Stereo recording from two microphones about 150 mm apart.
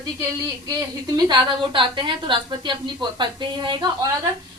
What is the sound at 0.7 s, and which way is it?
A woman's voice, 25° right (ahead or behind).